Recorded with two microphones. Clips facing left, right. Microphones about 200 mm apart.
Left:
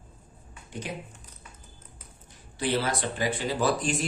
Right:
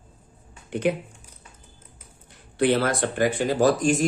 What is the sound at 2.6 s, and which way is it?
Speech, 60° right (ahead or behind).